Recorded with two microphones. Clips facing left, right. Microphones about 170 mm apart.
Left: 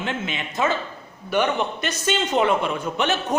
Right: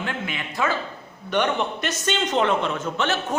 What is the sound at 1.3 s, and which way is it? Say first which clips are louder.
A man's voice: left 1 dB; 5° left (ahead or behind).